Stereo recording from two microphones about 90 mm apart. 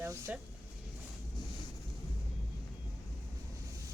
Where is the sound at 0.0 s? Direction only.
25° right (ahead or behind).